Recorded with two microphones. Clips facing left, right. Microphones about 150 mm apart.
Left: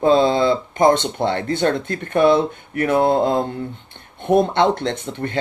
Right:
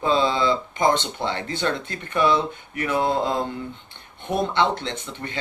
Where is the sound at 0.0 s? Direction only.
50° left (ahead or behind).